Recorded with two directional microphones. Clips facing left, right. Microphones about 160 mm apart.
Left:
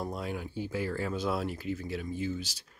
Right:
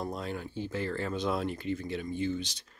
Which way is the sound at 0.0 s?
10° left (ahead or behind).